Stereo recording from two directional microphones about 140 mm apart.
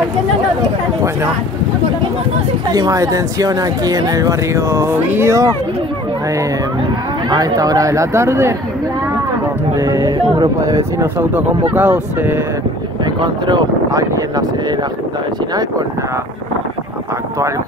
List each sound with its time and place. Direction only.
2.7 s speech: 25° right (ahead or behind)
7.2 s speech: 30° right (ahead or behind)
9.8 s speech: 25° right (ahead or behind)
10.1 s speech: 40° right (ahead or behind)
10.6 s speech: 25° right (ahead or behind)
13.0 s speech: 30° right (ahead or behind)